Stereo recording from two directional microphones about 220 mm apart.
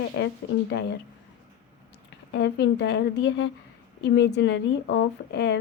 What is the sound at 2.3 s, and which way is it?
Speech, 50° left (ahead or behind).